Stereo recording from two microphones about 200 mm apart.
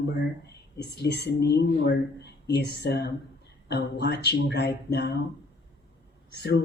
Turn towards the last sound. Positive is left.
turn(degrees=55)  # may be behind; listen again after turning